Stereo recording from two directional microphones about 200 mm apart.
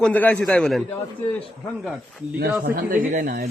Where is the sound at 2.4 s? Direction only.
50° right (ahead or behind).